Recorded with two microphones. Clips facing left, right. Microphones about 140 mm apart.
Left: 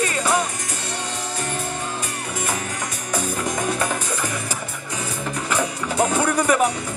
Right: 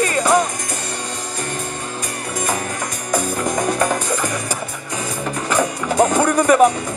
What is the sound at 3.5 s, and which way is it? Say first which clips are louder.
Music: right 6 dB; 40° right (ahead or behind).